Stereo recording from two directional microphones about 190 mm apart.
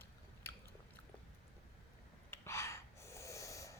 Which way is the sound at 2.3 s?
15° left (ahead or behind).